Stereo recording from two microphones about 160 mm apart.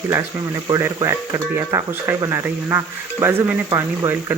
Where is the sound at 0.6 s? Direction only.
25° right (ahead or behind).